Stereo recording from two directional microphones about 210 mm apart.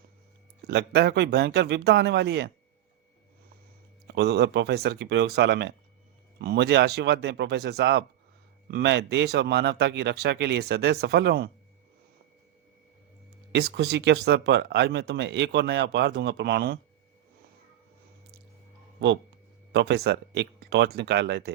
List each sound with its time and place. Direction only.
0.7 s speech: 50° right (ahead or behind)
4.0 s speech: 50° right (ahead or behind)
13.5 s speech: 50° right (ahead or behind)
19.7 s speech: 55° right (ahead or behind)